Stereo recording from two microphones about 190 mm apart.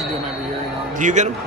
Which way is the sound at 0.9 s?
40° right (ahead or behind).